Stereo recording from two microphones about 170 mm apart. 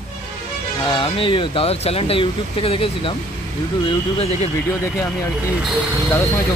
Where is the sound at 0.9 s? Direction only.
30° left (ahead or behind).